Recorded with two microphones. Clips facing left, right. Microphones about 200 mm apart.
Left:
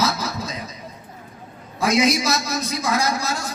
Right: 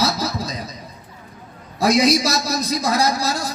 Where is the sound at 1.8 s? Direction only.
35° right (ahead or behind).